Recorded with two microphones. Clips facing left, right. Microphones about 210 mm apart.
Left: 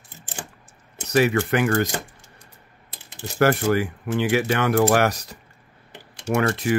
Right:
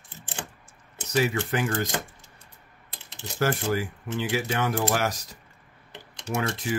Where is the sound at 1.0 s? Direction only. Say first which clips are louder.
Left 6 dB; 65° left (ahead or behind).